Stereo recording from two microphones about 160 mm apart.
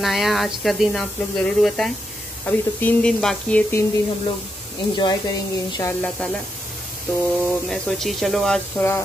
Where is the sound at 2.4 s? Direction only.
10° left (ahead or behind).